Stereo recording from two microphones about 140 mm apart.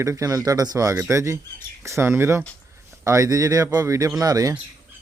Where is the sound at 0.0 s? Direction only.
20° right (ahead or behind).